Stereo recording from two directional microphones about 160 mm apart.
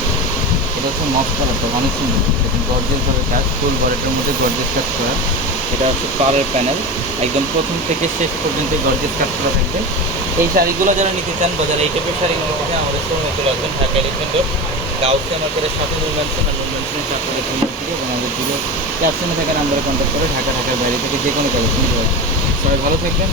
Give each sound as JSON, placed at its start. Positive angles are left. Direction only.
{"t": 10.5, "sound": "speech", "side_deg": -65}